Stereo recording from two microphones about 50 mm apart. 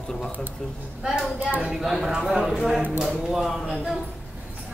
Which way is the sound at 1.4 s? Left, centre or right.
Right.